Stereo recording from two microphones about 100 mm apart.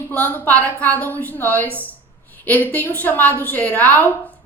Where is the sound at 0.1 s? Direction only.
20° left (ahead or behind).